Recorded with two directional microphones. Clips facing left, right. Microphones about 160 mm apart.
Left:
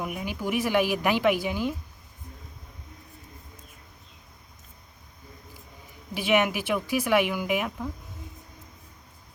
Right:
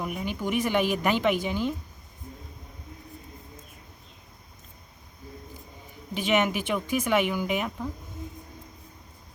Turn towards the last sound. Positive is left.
turn(degrees=5)  # may be behind; listen again after turning